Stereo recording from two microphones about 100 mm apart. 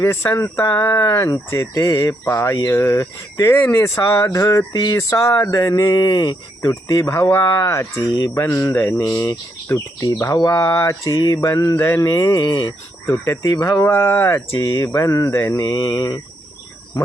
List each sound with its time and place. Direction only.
0.0 s speech: 25° left (ahead or behind)
13.8 s speech: 25° left (ahead or behind); by 16.2 s 50° left (ahead or behind)